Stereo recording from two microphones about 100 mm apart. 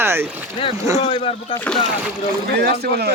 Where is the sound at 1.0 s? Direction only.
70° left (ahead or behind).